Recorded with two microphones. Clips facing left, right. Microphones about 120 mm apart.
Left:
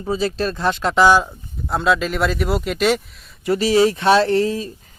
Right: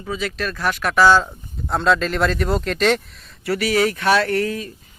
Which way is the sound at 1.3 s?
Centre (ahead or behind).